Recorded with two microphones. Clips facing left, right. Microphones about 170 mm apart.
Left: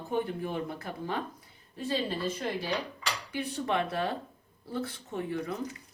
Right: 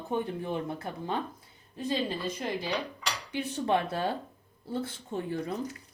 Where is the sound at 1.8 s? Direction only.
20° right (ahead or behind).